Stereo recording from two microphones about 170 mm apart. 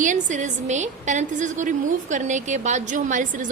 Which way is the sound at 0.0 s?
45° right (ahead or behind).